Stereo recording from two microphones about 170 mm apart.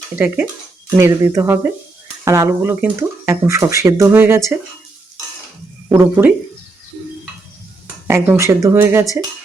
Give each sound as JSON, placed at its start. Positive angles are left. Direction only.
{"t": 0.9, "sound": "speech", "side_deg": -15}
{"t": 5.9, "sound": "speech", "side_deg": -10}
{"t": 8.0, "sound": "speech", "side_deg": -15}